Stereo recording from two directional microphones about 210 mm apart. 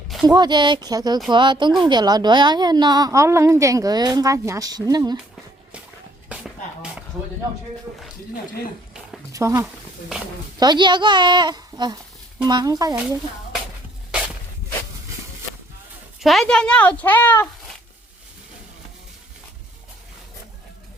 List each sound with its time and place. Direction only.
0.3 s a woman's voice: 20° right (ahead or behind)
6.2 s a sound: 5° right (ahead or behind)
9.3 s a woman's voice: 15° right (ahead or behind)
16.2 s a woman's voice: centre (ahead or behind)